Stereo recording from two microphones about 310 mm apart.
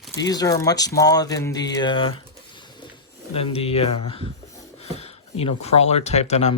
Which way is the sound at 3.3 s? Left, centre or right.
Centre.